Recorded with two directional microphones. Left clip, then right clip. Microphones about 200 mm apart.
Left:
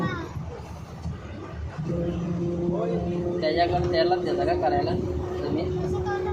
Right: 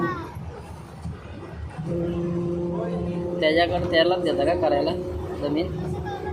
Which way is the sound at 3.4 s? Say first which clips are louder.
Right 3 dB; 60° right (ahead or behind).